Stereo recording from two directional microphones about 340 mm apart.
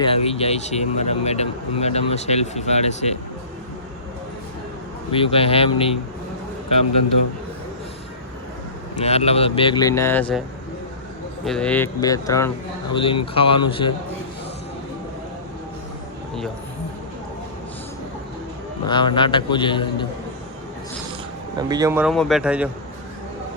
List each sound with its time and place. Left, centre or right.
0.0 s speech: centre
5.1 s speech: centre
9.0 s speech: centre
11.4 s speech: centre
18.9 s speech: centre
21.7 s a man's voice: centre